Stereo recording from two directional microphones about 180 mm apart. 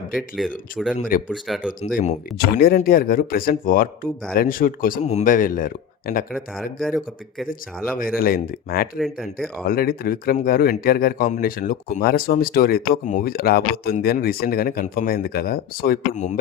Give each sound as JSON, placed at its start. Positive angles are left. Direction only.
{"t": 1.3, "sound": "speech", "side_deg": 0}
{"t": 2.0, "sound": "speech", "side_deg": 50}
{"t": 6.3, "sound": "speech", "side_deg": 0}
{"t": 7.9, "sound": "speech", "side_deg": 50}
{"t": 9.0, "sound": "speech", "side_deg": 0}
{"t": 9.6, "sound": "speech", "side_deg": 55}